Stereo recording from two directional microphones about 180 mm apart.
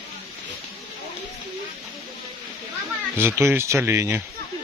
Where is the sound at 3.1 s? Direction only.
15° right (ahead or behind).